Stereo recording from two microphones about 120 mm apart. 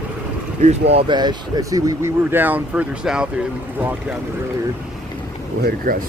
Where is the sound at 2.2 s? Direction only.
15° right (ahead or behind).